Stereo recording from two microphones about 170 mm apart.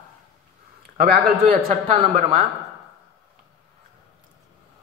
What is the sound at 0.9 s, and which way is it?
Speech, 70° right (ahead or behind).